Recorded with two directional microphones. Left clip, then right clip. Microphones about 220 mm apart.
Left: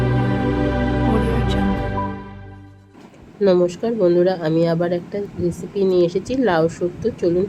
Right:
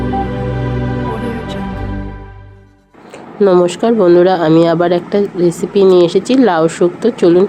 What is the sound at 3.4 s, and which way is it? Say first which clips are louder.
Speech: right 7 dB; 10° right (ahead or behind).